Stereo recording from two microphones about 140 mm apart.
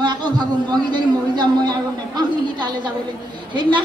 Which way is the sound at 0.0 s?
30° right (ahead or behind).